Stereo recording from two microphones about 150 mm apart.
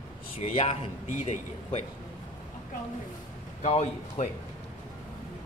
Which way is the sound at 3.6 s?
45° left (ahead or behind).